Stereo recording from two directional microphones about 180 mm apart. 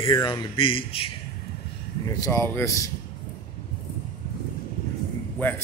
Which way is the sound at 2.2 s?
15° left (ahead or behind).